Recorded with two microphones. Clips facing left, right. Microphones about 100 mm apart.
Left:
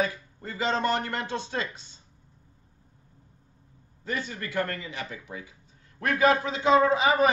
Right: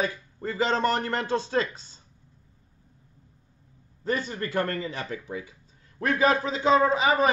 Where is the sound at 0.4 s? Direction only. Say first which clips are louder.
Right 3 dB; 35° right (ahead or behind).